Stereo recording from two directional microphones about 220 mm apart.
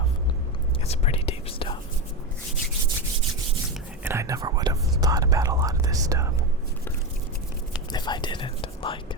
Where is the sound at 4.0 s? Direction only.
10° right (ahead or behind).